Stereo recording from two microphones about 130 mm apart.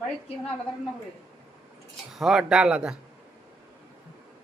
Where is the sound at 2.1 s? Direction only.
Centre (ahead or behind).